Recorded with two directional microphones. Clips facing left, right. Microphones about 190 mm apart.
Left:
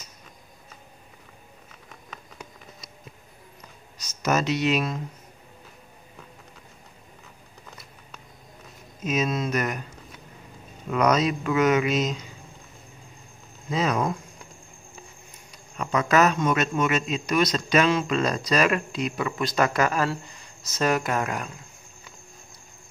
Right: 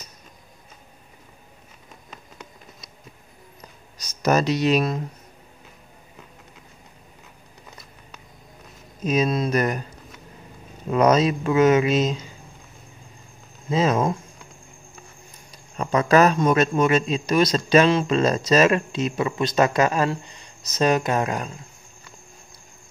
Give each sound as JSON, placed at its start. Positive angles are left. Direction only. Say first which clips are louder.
{"t": 4.0, "sound": "speech", "louder": "right 4 dB", "side_deg": -35}
{"t": 9.0, "sound": "speech", "louder": "right 4 dB", "side_deg": -35}
{"t": 10.9, "sound": "a man's voice", "louder": "right 4 dB", "side_deg": -30}
{"t": 13.7, "sound": "a man's voice", "louder": "right 4 dB", "side_deg": -25}
{"t": 15.8, "sound": "a man's voice", "louder": "right 4 dB", "side_deg": -30}